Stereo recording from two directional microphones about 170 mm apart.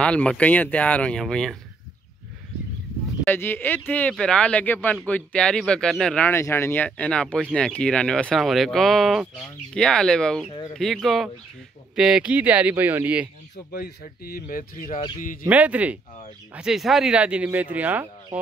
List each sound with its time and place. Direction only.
0.0 s speech: 5° left (ahead or behind)
3.3 s speech: 10° left (ahead or behind); by 13.3 s 10° right (ahead or behind)
13.7 s speech: 60° left (ahead or behind)
15.4 s speech: 10° right (ahead or behind)